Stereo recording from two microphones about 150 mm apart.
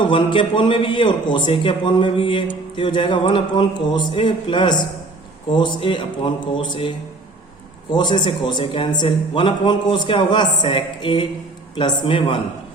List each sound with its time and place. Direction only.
0.0 s a man's voice: 35° left (ahead or behind)
7.9 s a man's voice: 30° left (ahead or behind)